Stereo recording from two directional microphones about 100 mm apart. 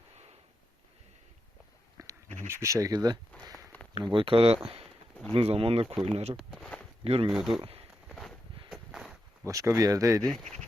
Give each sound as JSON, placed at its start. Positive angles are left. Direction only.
{"t": 2.0, "sound": "a sound", "side_deg": -35}
{"t": 2.5, "sound": "speech", "side_deg": -30}
{"t": 2.9, "sound": "speech", "side_deg": -45}
{"t": 4.1, "sound": "speech", "side_deg": -65}
{"t": 6.1, "sound": "speech", "side_deg": -90}
{"t": 6.3, "sound": "a sound", "side_deg": 5}
{"t": 7.0, "sound": "speech", "side_deg": -70}
{"t": 7.3, "sound": "speech", "side_deg": -5}
{"t": 8.1, "sound": "a sound", "side_deg": 5}
{"t": 9.5, "sound": "speech", "side_deg": -30}
{"t": 10.2, "sound": "speech", "side_deg": 5}